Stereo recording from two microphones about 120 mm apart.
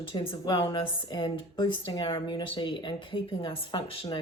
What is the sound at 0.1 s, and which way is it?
A woman's voice, 45° left (ahead or behind).